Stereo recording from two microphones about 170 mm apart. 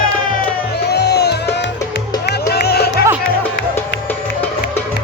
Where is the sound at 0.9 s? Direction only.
75° left (ahead or behind).